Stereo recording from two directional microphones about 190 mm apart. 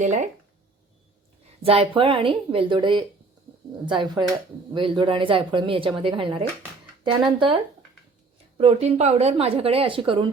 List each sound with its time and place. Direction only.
0.0 s a woman's voice: 40° right (ahead or behind)
1.6 s a woman's voice: 30° right (ahead or behind)